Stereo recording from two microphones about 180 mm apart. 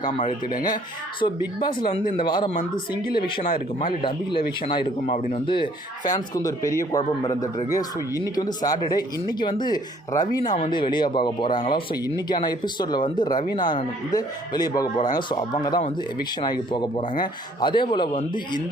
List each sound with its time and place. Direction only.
0.2 s speech: 45° left (ahead or behind)
1.2 s speech: 25° left (ahead or behind)
3.8 s speech: 30° left (ahead or behind)
5.0 s speech: 40° left (ahead or behind)
6.1 s speech: 20° left (ahead or behind)